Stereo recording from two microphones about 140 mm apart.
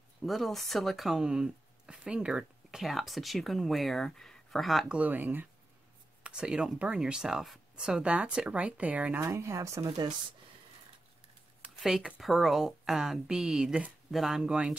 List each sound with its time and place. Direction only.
0.2 s speech: centre (ahead or behind); by 10.1 s 30° right (ahead or behind)
11.6 s speech: 5° right (ahead or behind)